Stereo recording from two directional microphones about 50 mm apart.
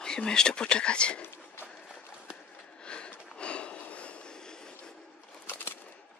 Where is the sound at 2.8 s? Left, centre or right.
Left.